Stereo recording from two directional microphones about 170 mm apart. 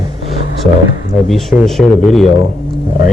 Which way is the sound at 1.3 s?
Centre (ahead or behind).